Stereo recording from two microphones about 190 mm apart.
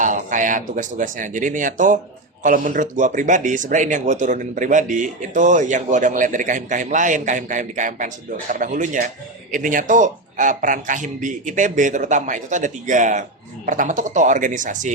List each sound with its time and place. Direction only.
0.0 s speech: 40° right (ahead or behind)